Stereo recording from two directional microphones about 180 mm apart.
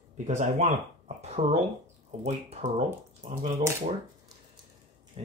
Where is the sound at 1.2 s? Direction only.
35° right (ahead or behind).